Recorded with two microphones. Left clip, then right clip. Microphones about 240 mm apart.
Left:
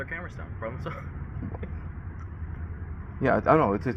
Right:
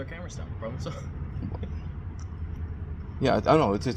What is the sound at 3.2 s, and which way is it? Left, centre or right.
Speech, centre.